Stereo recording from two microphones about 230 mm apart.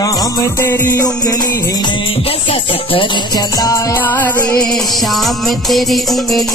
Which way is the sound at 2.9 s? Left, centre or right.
Centre.